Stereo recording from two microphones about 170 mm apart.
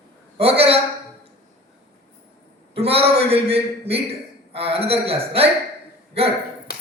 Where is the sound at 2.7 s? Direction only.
35° right (ahead or behind).